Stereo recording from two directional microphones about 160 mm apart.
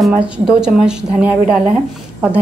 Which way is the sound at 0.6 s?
5° right (ahead or behind).